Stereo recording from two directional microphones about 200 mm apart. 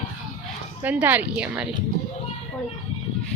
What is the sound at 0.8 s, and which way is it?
Speech, 10° right (ahead or behind).